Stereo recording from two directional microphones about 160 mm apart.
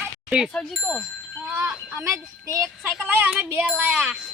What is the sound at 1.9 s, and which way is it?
Speech, 20° right (ahead or behind).